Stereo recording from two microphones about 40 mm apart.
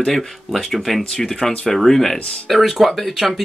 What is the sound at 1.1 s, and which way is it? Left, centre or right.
Speech, centre.